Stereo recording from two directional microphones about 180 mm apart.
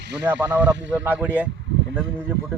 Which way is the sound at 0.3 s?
10° right (ahead or behind).